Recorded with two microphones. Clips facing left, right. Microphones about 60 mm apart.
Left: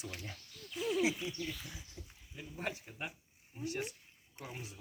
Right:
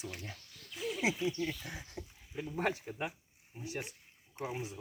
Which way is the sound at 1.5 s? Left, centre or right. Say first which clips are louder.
Right 4 dB; right.